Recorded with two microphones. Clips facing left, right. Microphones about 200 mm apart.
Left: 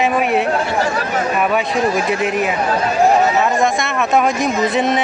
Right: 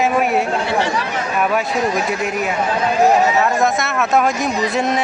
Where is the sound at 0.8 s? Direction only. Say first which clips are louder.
Left 2 dB; 40° left (ahead or behind).